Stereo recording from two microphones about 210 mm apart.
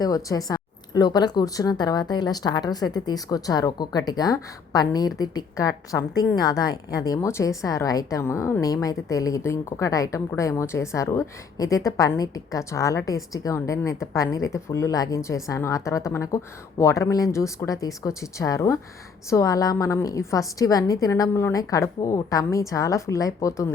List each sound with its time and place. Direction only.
0.0 s a woman's voice: 15° left (ahead or behind)